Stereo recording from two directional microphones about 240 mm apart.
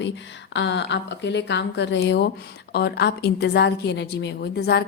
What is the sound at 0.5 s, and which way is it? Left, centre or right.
A woman's voice, left.